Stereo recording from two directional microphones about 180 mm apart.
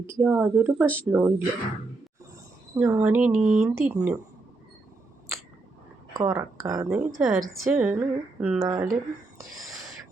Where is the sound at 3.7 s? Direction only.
15° right (ahead or behind).